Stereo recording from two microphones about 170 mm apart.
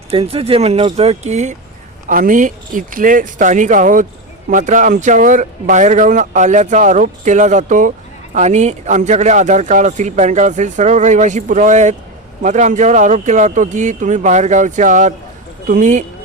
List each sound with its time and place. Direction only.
0.1 s speech: 35° right (ahead or behind)